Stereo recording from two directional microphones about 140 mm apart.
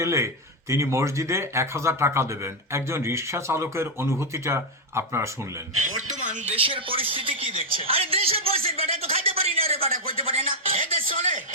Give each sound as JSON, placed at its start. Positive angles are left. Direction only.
{"t": 0.0, "sound": "speech", "side_deg": -20}
{"t": 6.6, "sound": "a woman's voice", "side_deg": -40}